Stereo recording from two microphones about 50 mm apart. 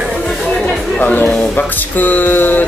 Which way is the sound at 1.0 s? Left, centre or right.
Left.